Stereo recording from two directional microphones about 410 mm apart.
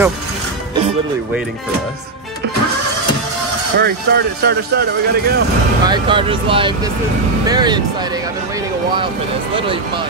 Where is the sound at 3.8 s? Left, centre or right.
Right.